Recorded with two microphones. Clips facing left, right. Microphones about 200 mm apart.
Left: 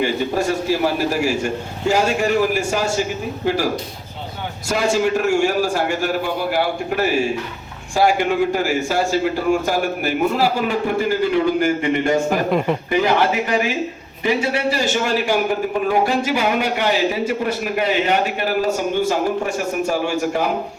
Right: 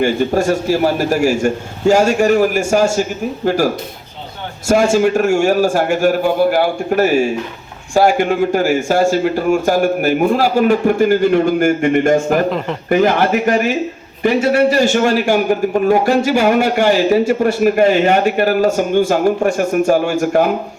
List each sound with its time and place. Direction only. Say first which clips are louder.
0.0 s a man's voice: right 5 dB; 45° right (ahead or behind)
4.7 s a man's voice: right 6 dB; 45° right (ahead or behind)
12.5 s a man's voice: left 1 dB; 10° left (ahead or behind)
12.9 s a man's voice: right 6 dB; 50° right (ahead or behind)